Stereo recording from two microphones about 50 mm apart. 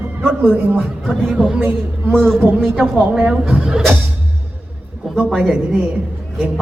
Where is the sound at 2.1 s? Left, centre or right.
Centre.